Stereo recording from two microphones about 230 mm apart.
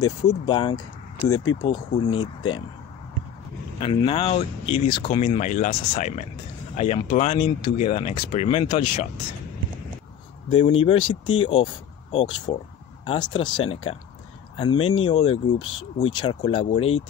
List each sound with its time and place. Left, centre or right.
0.3 s speech: left
1.3 s speech: left
1.6 s speech: centre
3.8 s speech: left
10.8 s speech: left